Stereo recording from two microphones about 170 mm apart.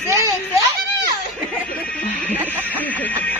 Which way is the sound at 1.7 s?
5° left (ahead or behind).